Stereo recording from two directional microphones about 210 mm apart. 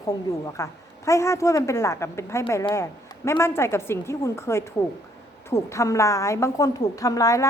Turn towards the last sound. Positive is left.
turn(degrees=15)  # may be behind; listen again after turning